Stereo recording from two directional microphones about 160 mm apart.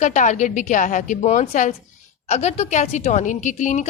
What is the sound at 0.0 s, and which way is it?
A woman's voice, 50° left (ahead or behind).